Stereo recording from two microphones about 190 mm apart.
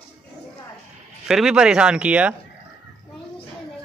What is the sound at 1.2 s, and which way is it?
Speech, 5° right (ahead or behind).